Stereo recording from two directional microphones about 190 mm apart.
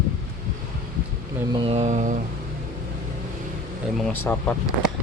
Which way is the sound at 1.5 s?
30° right (ahead or behind).